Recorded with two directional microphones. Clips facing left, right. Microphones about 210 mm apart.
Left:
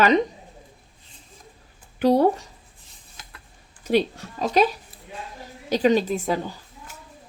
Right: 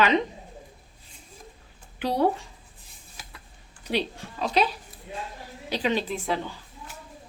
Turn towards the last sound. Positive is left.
turn(degrees=40)  # may be behind; listen again after turning